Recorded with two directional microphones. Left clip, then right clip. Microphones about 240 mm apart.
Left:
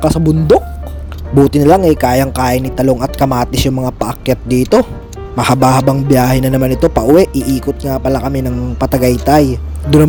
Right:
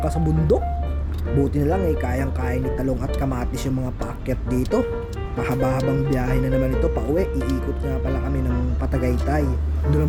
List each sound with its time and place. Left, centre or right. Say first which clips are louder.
0.0 s speech: left 12 dB; left